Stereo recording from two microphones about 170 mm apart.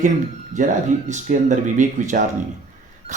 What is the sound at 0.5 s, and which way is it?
Speech, 45° right (ahead or behind).